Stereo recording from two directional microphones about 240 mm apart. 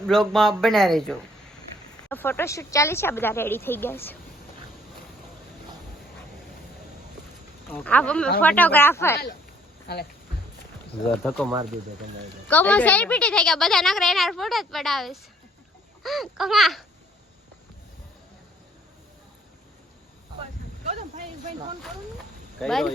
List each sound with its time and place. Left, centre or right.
0.0 s a woman's voice: centre
7.7 s a woman's voice: centre
9.8 s speech: left
11.2 s a woman's voice: centre
20.8 s a sound: right
22.6 s a woman's voice: centre